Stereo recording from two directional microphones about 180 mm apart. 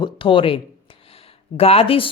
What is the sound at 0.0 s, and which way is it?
Speech, 30° left (ahead or behind).